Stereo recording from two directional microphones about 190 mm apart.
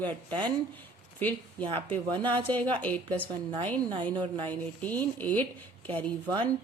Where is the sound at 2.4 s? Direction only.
10° left (ahead or behind).